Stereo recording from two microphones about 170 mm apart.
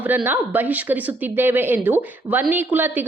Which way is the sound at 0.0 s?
10° right (ahead or behind).